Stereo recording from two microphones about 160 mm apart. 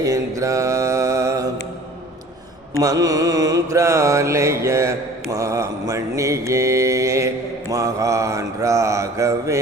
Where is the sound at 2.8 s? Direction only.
20° right (ahead or behind).